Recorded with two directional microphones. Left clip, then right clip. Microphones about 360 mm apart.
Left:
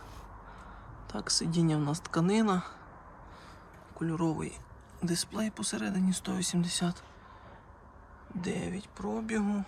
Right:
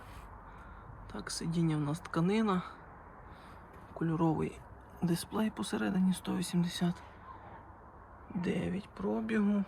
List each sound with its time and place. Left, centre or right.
1.0 s speech: centre
3.9 s speech: centre
8.4 s speech: centre